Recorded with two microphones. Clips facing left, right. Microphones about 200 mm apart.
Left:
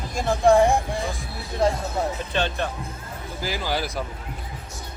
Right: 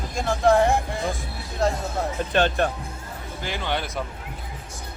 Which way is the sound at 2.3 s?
50° right (ahead or behind).